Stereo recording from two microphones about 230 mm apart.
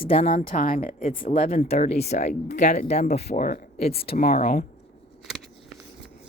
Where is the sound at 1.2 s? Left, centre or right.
Left.